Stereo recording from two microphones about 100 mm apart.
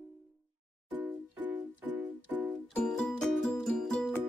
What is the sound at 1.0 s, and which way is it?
Music, 15° right (ahead or behind).